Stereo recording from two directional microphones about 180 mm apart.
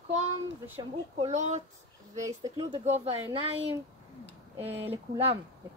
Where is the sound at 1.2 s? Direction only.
40° right (ahead or behind).